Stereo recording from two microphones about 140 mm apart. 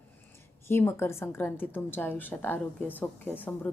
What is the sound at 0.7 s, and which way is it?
Speech, 15° left (ahead or behind).